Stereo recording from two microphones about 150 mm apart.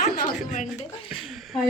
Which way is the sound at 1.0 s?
Centre (ahead or behind).